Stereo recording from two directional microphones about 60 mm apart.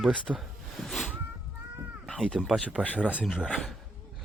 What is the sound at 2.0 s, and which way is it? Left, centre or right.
Cat, centre.